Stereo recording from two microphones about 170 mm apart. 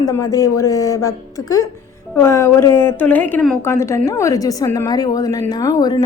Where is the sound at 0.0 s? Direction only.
20° left (ahead or behind).